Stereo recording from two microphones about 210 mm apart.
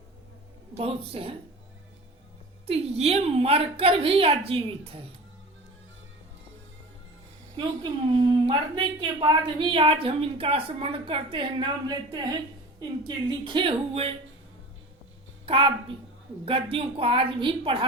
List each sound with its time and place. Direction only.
0.8 s a woman's voice: 25° right (ahead or behind)
2.6 s a woman's voice: 30° right (ahead or behind)
7.5 s a woman's voice: 25° right (ahead or behind)
15.4 s a woman's voice: 25° right (ahead or behind)